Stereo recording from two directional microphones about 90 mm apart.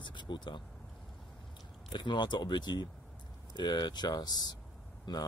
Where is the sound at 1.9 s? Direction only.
60° left (ahead or behind).